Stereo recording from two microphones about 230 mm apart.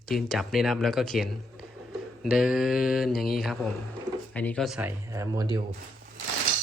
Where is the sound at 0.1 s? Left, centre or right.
Centre.